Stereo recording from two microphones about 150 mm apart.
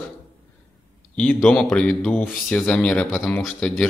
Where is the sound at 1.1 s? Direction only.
5° left (ahead or behind).